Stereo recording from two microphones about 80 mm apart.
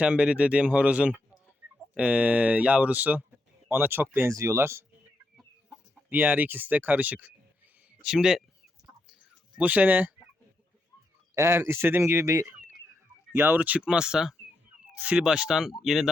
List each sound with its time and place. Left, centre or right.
0.0 s speech: centre
4.3 s speech: right
6.1 s speech: right
8.0 s speech: centre
9.6 s speech: centre
11.3 s speech: right
13.3 s speech: right; by 16.0 s centre